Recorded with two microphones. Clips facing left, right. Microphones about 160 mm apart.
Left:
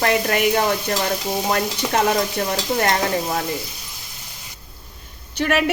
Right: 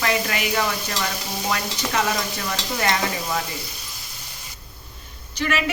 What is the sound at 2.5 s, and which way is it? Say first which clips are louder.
Stir: left 2 dB; 40° left (ahead or behind).